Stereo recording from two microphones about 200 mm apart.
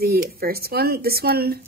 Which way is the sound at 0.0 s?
50° right (ahead or behind).